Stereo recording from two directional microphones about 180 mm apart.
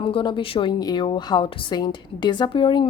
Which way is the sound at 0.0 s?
30° left (ahead or behind).